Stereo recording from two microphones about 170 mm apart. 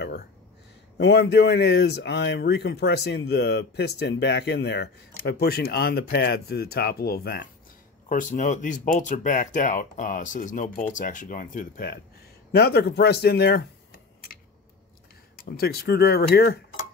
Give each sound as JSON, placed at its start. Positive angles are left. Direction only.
{"t": 0.0, "sound": "a sound", "side_deg": 70}
{"t": 0.9, "sound": "speech", "side_deg": 85}
{"t": 8.1, "sound": "speech", "side_deg": 50}
{"t": 12.5, "sound": "speech", "side_deg": 70}
{"t": 15.5, "sound": "speech", "side_deg": 65}